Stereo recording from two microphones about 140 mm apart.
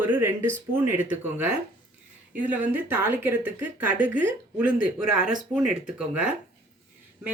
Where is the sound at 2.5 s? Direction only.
15° right (ahead or behind).